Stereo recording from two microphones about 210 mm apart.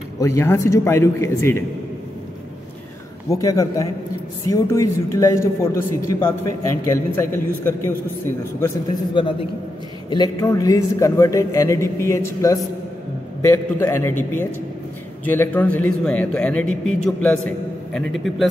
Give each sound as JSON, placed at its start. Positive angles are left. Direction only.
{"t": 0.2, "sound": "speech", "side_deg": 15}
{"t": 3.3, "sound": "a man's voice", "side_deg": 15}
{"t": 15.2, "sound": "a man's voice", "side_deg": 10}